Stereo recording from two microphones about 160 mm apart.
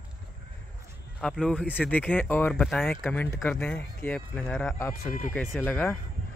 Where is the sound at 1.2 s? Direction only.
5° left (ahead or behind).